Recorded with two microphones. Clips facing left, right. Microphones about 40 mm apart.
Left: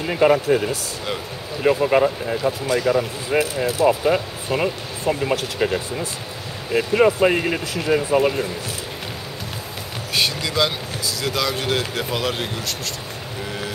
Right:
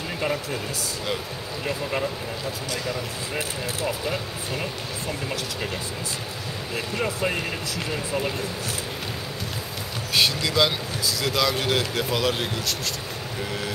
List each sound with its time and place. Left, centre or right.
0.2 s speech: left
3.3 s speech: left
4.0 s speech: left
10.1 s speech: centre